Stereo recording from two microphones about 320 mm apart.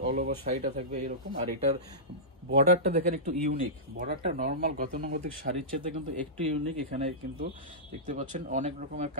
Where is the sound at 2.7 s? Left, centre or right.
Centre.